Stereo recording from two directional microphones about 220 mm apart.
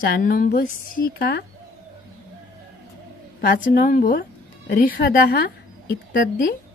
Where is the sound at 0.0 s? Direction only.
45° left (ahead or behind).